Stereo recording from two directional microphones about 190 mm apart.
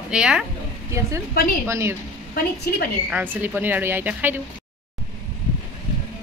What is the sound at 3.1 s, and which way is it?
A woman's voice, 10° right (ahead or behind).